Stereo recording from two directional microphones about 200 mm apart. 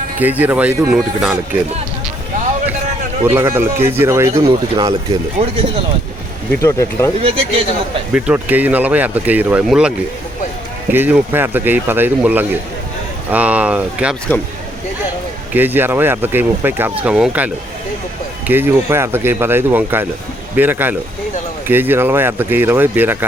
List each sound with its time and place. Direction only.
0.2 s speech: 10° right (ahead or behind)
3.2 s speech: 15° right (ahead or behind)
5.4 s speech: 35° right (ahead or behind)
6.6 s speech: 15° left (ahead or behind)
7.2 s speech: 30° right (ahead or behind)
8.1 s speech: 5° right (ahead or behind)
10.9 s speech: 10° right (ahead or behind)
15.5 s speech: 10° right (ahead or behind)